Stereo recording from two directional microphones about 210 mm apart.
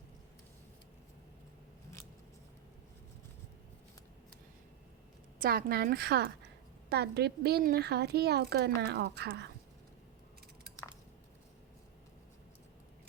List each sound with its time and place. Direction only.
5.4 s a woman's voice: 45° right (ahead or behind)